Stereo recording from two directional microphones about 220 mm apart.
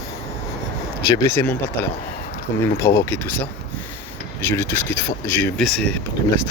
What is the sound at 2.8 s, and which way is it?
Speech, 15° left (ahead or behind).